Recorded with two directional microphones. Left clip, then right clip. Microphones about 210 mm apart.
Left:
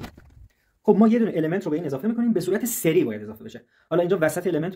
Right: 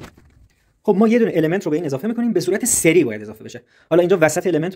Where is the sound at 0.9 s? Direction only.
30° right (ahead or behind).